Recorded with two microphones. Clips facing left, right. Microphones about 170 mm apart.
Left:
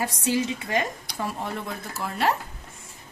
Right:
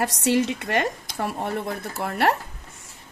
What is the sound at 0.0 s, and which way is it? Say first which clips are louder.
Speech: right 4 dB; 70° right (ahead or behind).